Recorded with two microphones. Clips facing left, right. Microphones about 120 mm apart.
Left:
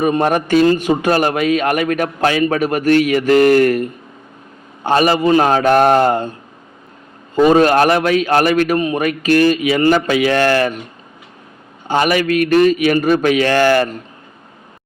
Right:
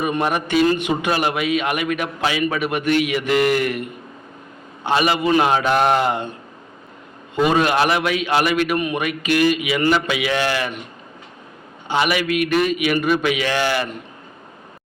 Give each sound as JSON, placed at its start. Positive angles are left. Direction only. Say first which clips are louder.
{"t": 0.0, "sound": "a man's voice", "louder": "left 6 dB", "side_deg": 40}
{"t": 7.3, "sound": "a man's voice", "louder": "left 6 dB", "side_deg": 40}
{"t": 11.9, "sound": "a man's voice", "louder": "left 5 dB", "side_deg": 45}